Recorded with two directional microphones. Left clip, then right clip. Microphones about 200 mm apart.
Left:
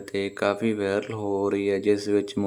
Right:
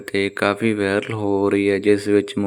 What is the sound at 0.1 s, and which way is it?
Speech, 15° right (ahead or behind).